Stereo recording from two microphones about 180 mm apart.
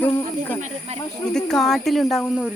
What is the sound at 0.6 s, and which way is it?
Speech, 40° right (ahead or behind).